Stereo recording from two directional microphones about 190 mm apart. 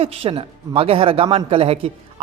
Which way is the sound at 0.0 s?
30° right (ahead or behind).